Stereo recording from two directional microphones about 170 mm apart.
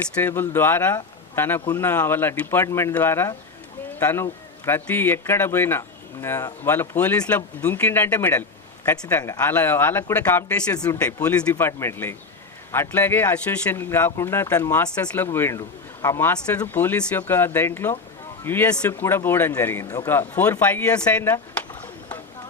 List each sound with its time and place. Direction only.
0.2 s speech: 15° left (ahead or behind)